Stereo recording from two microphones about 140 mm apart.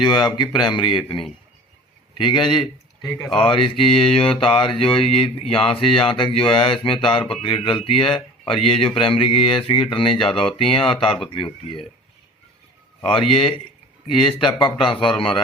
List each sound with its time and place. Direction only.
0.0 s speech: 30° left (ahead or behind)
13.0 s speech: 40° left (ahead or behind)